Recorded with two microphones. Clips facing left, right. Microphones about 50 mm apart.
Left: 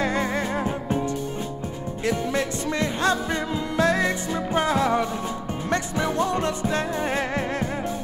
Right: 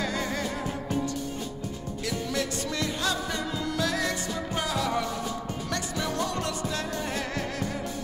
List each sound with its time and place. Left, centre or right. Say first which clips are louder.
0.0 s music: left 6 dB; left